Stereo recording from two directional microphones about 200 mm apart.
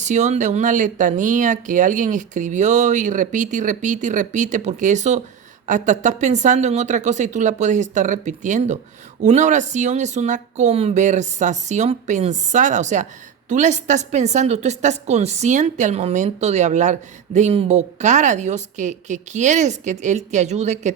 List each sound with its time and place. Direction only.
0.0 s a woman's voice: 35° right (ahead or behind)